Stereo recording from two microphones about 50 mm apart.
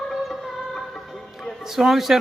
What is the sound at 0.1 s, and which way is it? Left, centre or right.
Music, centre.